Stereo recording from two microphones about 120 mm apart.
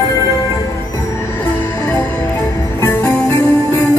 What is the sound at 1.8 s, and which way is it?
Music, 25° left (ahead or behind).